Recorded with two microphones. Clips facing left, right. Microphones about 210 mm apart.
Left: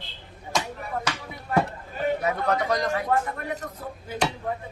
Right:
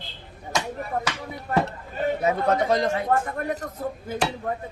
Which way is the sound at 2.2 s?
25° right (ahead or behind).